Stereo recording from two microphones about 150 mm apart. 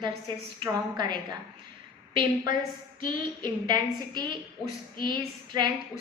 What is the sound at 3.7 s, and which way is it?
Speech, 30° right (ahead or behind).